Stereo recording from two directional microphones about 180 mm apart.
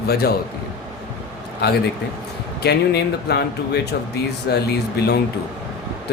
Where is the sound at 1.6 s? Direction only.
65° left (ahead or behind).